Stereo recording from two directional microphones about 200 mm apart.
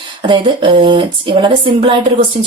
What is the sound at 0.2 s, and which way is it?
Speech, 25° right (ahead or behind).